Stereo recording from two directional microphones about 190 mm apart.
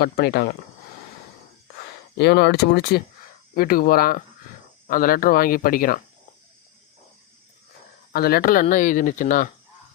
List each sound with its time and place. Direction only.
0.0 s speech: 55° left (ahead or behind)
2.1 s speech: 60° left (ahead or behind)
8.1 s speech: 50° left (ahead or behind)